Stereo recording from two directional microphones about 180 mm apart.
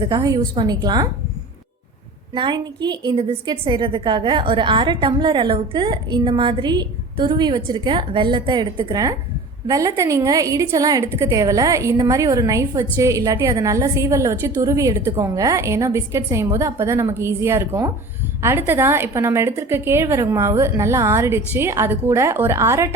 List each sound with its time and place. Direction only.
0.0 s a woman's voice: 25° right (ahead or behind)
2.3 s a woman's voice: 25° right (ahead or behind)